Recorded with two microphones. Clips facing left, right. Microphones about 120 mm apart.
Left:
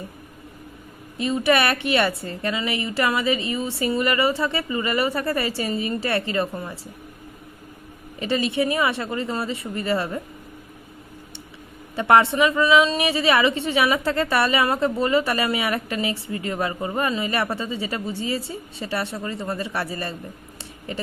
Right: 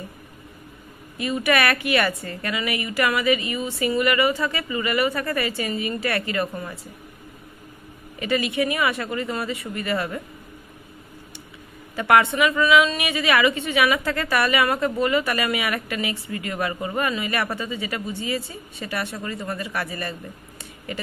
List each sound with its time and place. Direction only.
1.1 s a woman's voice: 25° left (ahead or behind)
8.2 s a woman's voice: 30° left (ahead or behind)
11.9 s a woman's voice: 30° left (ahead or behind)